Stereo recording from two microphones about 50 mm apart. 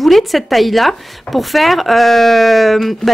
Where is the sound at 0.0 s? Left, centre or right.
Centre.